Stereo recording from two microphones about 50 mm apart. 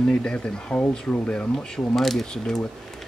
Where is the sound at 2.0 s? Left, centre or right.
Centre.